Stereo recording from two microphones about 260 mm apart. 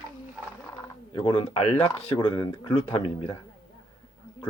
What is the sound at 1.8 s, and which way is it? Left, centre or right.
Speech, centre.